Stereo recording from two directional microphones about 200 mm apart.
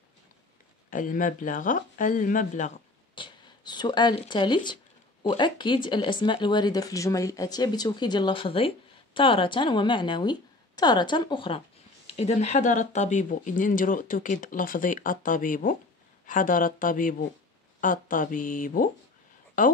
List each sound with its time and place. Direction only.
0.8 s speech: 40° left (ahead or behind)
3.2 s speech: 20° left (ahead or behind); by 18.9 s 40° left (ahead or behind)